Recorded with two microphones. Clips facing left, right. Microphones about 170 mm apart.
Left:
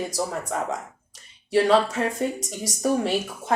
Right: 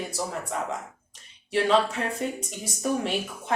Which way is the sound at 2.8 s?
35° left (ahead or behind).